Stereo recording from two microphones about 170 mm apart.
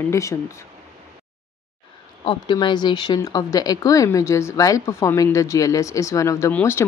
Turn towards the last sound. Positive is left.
turn(degrees=15)  # may be behind; listen again after turning